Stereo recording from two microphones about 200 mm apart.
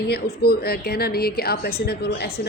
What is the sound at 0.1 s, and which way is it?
A woman's voice, 50° left (ahead or behind).